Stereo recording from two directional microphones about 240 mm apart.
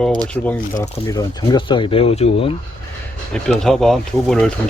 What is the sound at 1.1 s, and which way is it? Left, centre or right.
Speech, centre.